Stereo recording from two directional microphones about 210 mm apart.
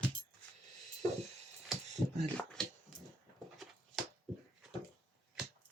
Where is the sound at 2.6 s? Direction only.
5° left (ahead or behind).